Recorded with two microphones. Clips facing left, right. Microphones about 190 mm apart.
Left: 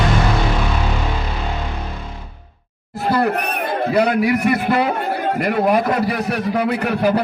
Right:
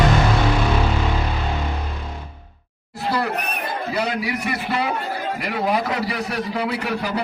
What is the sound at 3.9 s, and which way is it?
A man's voice, 55° left (ahead or behind).